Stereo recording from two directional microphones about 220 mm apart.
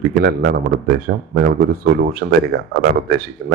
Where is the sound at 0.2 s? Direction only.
40° right (ahead or behind).